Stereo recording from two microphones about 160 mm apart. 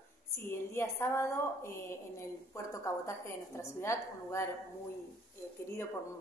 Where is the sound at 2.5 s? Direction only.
20° left (ahead or behind).